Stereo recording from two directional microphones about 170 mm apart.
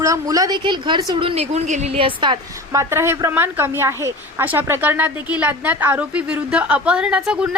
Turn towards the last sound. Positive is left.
turn(degrees=-5)  # may be behind; listen again after turning